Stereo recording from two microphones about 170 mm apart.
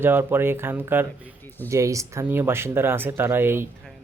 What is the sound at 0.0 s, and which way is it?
Speech, 10° right (ahead or behind).